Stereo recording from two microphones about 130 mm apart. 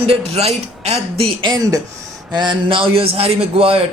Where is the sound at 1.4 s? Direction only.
30° right (ahead or behind); by 3.8 s 45° right (ahead or behind).